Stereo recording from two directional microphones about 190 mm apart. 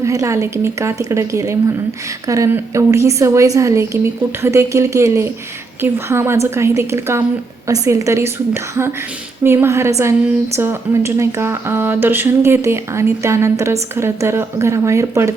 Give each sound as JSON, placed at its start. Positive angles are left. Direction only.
{"t": 0.0, "sound": "a woman's voice", "side_deg": -15}